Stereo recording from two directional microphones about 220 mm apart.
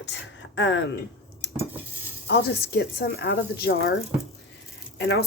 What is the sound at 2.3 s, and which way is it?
Speech, 50° left (ahead or behind).